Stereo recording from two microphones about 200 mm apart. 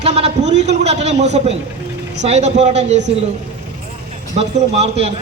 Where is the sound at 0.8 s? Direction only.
35° right (ahead or behind).